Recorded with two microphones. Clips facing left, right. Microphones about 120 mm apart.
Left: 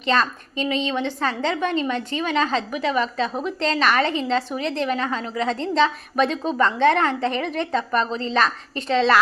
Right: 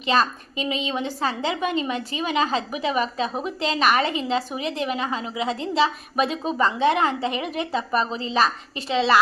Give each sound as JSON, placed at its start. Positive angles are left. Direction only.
{"t": 0.0, "sound": "a woman's voice", "side_deg": -15}